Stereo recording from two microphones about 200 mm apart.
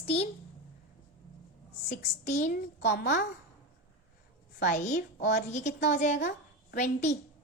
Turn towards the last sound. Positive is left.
turn(degrees=40)  # may be behind; listen again after turning